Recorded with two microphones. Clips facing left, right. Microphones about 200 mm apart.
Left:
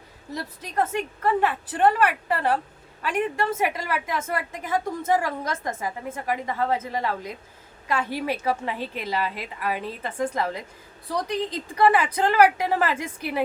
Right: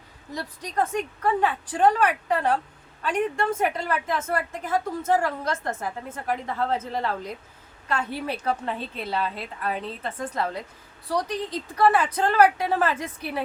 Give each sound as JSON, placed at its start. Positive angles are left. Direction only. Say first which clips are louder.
{"t": 0.3, "sound": "a woman's voice", "louder": "even", "side_deg": 5}